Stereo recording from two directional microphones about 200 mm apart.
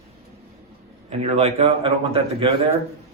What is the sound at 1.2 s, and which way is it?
A man's voice, 35° right (ahead or behind).